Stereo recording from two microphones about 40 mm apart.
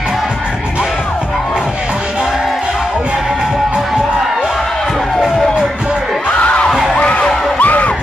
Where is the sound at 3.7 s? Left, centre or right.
Right.